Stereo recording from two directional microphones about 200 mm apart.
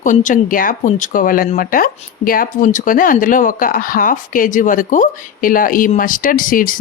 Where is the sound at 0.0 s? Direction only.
40° left (ahead or behind).